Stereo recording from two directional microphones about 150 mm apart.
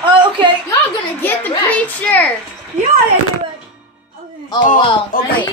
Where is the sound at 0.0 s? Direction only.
35° right (ahead or behind).